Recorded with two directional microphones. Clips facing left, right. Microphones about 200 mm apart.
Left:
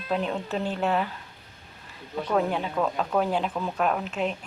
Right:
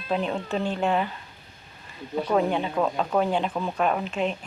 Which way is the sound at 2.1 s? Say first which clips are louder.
Right 2 dB; 5° right (ahead or behind).